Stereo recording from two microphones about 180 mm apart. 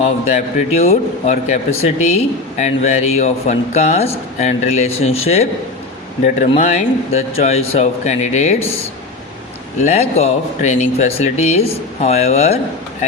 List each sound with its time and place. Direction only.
0.0 s a man's voice: 40° left (ahead or behind)
9.8 s a man's voice: 35° left (ahead or behind)